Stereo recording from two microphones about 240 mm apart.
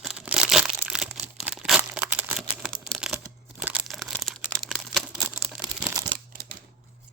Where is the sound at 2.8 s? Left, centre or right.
Centre.